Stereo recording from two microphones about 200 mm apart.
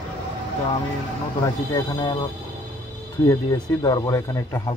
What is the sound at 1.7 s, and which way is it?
Speech, 20° left (ahead or behind).